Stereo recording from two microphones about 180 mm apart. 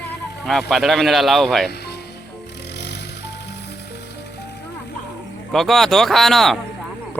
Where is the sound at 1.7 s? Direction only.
65° left (ahead or behind).